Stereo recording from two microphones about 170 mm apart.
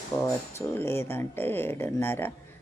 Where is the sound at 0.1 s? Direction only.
20° left (ahead or behind).